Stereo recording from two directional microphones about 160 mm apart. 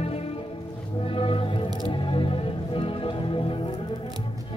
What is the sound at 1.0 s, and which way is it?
Music, 35° left (ahead or behind).